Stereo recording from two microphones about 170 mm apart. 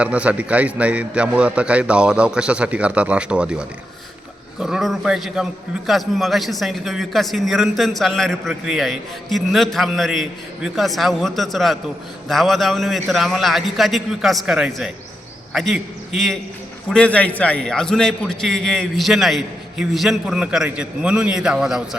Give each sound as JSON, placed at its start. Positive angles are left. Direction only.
{"t": 0.0, "sound": "a man's voice", "side_deg": -5}